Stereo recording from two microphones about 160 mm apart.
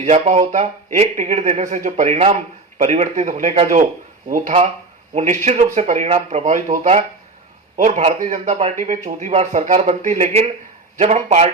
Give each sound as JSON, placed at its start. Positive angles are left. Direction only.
{"t": 0.0, "sound": "a man's voice", "side_deg": -45}
{"t": 5.1, "sound": "a man's voice", "side_deg": -50}